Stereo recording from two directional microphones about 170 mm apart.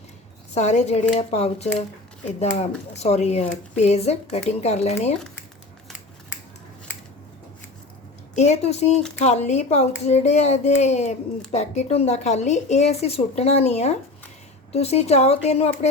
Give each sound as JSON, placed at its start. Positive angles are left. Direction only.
{"t": 0.5, "sound": "speech", "side_deg": 40}
{"t": 8.4, "sound": "speech", "side_deg": 40}